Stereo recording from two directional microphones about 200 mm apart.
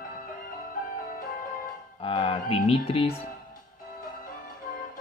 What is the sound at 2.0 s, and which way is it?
Speech, 25° left (ahead or behind).